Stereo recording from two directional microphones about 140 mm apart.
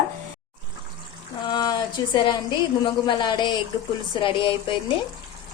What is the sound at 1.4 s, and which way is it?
A woman's voice, 30° left (ahead or behind).